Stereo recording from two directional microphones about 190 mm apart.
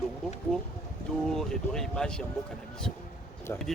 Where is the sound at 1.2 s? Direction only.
5° left (ahead or behind).